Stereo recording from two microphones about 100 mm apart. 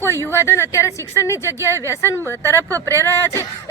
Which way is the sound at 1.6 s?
30° right (ahead or behind).